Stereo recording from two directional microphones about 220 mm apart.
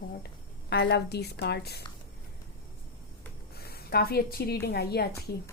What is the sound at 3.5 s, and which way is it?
A woman's voice, 45° left (ahead or behind).